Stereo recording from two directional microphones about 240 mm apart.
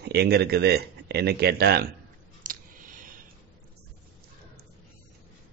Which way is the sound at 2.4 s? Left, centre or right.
Right.